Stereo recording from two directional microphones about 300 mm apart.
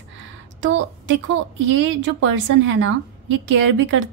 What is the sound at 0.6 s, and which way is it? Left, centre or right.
A woman's voice, right.